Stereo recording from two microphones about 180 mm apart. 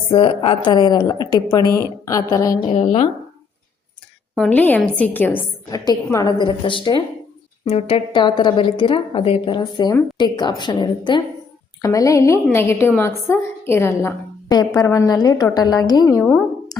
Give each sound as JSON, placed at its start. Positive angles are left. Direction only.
{"t": 0.1, "sound": "a woman's voice", "side_deg": 30}
{"t": 2.7, "sound": "speech", "side_deg": 35}
{"t": 4.4, "sound": "a woman's voice", "side_deg": 10}